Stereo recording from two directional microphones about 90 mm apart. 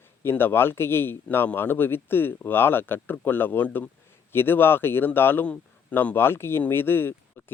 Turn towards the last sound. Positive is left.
turn(degrees=25)  # may be behind; listen again after turning